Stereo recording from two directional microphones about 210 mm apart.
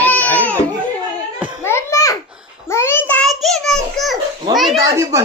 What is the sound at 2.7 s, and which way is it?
A child's voice, 10° left (ahead or behind).